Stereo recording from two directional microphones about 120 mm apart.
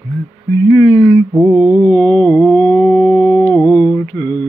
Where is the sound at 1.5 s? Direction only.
5° right (ahead or behind).